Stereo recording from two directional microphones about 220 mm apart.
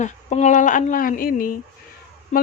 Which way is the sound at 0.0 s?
30° left (ahead or behind).